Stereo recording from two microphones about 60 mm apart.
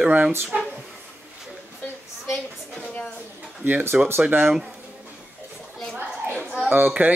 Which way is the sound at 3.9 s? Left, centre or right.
Centre.